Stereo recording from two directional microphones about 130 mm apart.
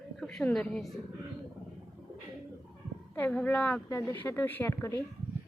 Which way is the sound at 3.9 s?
20° left (ahead or behind).